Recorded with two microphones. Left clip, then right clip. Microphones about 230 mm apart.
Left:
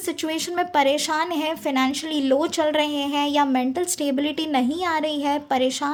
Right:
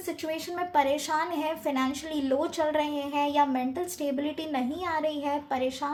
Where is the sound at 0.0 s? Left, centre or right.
Left.